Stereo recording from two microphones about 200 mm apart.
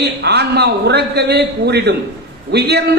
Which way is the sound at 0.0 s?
55° right (ahead or behind).